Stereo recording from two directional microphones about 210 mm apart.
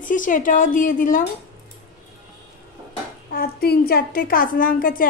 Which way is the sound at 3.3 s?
45° left (ahead or behind).